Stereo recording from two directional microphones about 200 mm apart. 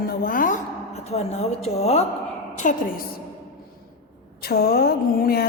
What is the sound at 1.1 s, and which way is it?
A woman's voice, 30° left (ahead or behind).